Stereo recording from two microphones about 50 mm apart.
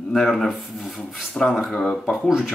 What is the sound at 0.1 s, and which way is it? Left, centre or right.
Speech, centre.